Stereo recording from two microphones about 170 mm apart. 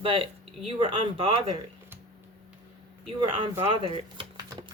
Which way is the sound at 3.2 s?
30° right (ahead or behind).